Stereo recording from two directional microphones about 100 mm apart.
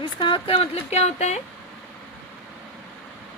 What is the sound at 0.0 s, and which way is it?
Speech, 55° left (ahead or behind).